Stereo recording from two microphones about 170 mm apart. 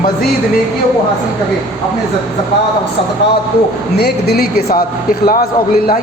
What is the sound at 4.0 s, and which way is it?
A man's voice, 70° left (ahead or behind).